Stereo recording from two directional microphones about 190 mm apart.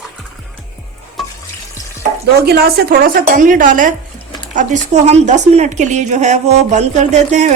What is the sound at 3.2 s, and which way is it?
A woman's voice, 45° right (ahead or behind).